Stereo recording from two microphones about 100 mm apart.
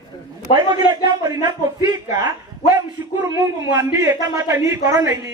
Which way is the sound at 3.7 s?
25° right (ahead or behind).